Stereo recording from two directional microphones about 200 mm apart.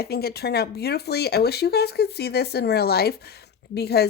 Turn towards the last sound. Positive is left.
turn(degrees=55)  # may be behind; listen again after turning